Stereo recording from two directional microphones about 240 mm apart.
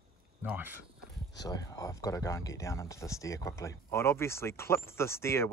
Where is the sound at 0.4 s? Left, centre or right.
Centre.